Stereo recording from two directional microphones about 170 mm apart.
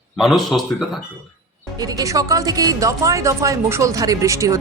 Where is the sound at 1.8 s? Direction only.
20° right (ahead or behind).